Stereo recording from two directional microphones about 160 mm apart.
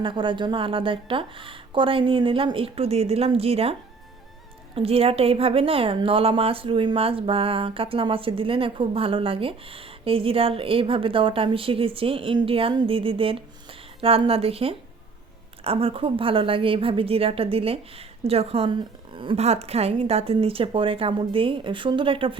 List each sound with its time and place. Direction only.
0.0 s a woman's voice: 30° right (ahead or behind)